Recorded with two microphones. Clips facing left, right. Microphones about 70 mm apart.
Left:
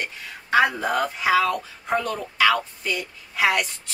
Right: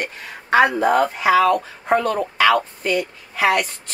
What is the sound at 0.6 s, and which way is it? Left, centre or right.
Speech, right.